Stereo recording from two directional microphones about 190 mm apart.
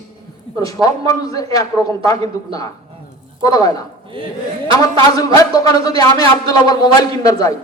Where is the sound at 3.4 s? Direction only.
20° left (ahead or behind).